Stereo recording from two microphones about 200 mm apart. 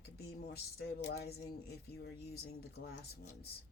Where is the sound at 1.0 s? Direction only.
55° left (ahead or behind).